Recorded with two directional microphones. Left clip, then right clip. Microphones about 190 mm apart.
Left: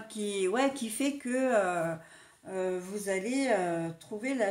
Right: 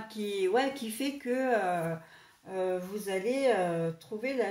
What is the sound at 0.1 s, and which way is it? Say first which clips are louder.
Speech: right 2 dB; 45° left (ahead or behind).